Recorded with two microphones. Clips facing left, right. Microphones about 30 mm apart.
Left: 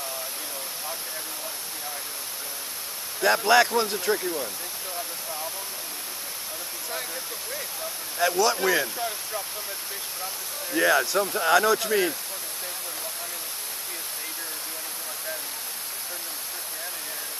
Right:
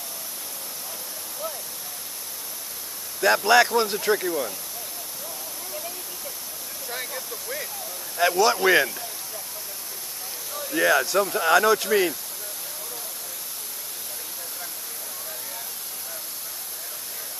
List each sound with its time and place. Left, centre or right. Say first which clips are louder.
3.2 s speech: right 2 dB; centre
8.2 s speech: right 3 dB; centre
8.6 s speech: right 5 dB; right
10.7 s speech: right 1 dB; centre